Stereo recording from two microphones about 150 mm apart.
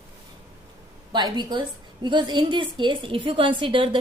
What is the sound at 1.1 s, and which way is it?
A woman's voice, 30° right (ahead or behind).